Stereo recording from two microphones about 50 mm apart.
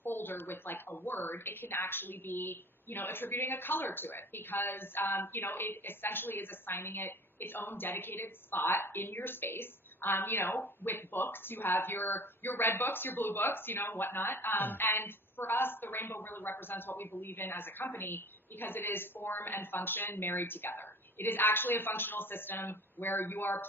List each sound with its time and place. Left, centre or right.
0.0 s speech: left
9.1 s speech: left